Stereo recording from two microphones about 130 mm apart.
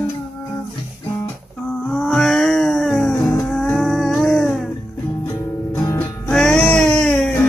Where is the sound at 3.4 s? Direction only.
5° left (ahead or behind).